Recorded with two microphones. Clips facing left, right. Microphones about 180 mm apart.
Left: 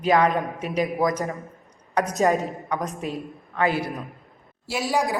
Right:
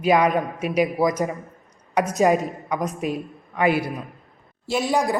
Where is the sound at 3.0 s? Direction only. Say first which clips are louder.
Right 4 dB; 15° right (ahead or behind).